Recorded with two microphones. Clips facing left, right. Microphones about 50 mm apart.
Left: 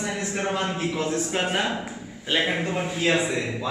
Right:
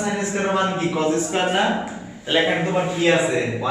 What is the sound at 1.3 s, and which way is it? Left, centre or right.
Speech, centre.